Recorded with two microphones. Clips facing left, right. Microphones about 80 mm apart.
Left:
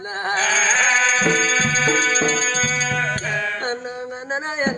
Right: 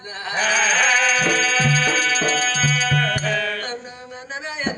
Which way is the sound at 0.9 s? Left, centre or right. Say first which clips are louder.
Left 1 dB; left.